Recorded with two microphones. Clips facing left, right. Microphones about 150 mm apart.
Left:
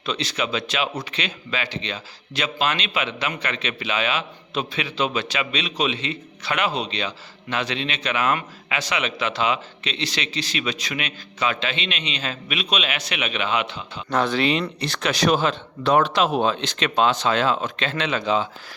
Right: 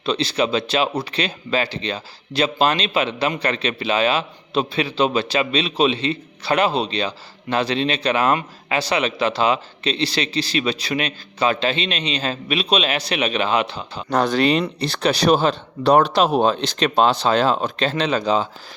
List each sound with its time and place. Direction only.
0.0 s speech: 30° right (ahead or behind)